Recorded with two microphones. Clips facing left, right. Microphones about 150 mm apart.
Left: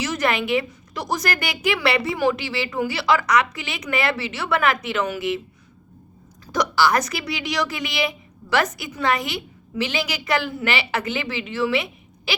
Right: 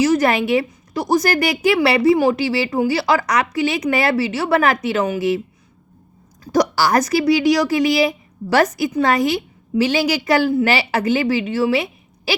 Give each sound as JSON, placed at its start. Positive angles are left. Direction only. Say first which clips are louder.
{"t": 0.0, "sound": "a woman's voice", "louder": "right 7 dB", "side_deg": -35}
{"t": 6.4, "sound": "a woman's voice", "louder": "right 4 dB", "side_deg": -40}